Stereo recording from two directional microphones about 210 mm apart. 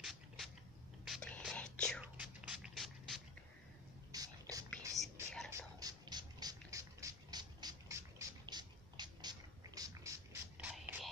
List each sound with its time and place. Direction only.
0.0 s a sound: centre (ahead or behind)
1.0 s whispering: centre (ahead or behind)
4.1 s a sound: 15° right (ahead or behind)
4.6 s whispering: centre (ahead or behind)
5.5 s ratchet: 15° right (ahead or behind)
10.6 s whispering: 5° right (ahead or behind)